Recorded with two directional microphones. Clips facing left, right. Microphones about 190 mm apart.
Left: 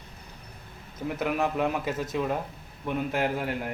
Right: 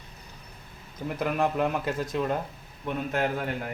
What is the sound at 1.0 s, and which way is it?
A man's voice, 5° left (ahead or behind).